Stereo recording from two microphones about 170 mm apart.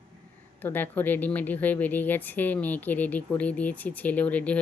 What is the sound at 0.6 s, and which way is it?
Speech, 10° left (ahead or behind).